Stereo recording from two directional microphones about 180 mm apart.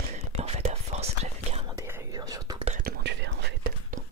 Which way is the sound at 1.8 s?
20° right (ahead or behind).